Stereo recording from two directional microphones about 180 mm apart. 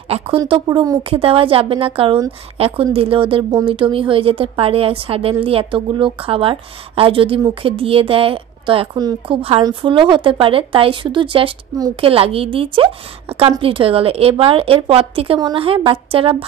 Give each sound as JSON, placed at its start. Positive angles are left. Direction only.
{"t": 0.4, "sound": "a woman's voice", "side_deg": -25}